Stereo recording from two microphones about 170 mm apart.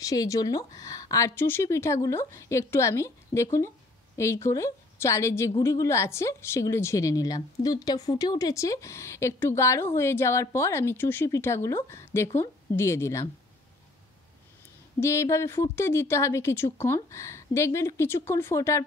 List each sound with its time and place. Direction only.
0.0 s a woman's voice: 20° left (ahead or behind)
15.0 s a woman's voice: 15° left (ahead or behind)